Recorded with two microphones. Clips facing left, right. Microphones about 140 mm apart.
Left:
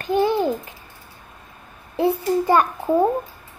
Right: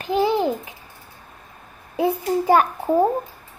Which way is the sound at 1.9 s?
10° right (ahead or behind).